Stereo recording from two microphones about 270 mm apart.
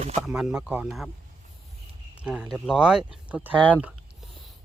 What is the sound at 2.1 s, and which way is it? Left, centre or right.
Speech, centre.